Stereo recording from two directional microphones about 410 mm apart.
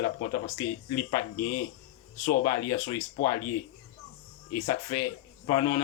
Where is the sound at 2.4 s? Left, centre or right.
Centre.